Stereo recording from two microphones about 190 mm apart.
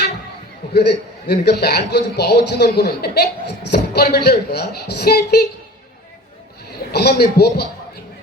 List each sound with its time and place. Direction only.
0.7 s a man's voice: 60° left (ahead or behind)
6.9 s a man's voice: 60° left (ahead or behind)